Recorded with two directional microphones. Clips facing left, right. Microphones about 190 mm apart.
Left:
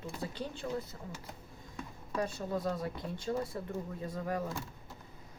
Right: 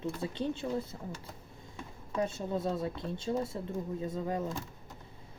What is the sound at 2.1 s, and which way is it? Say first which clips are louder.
Speech: right 2 dB; 25° right (ahead or behind).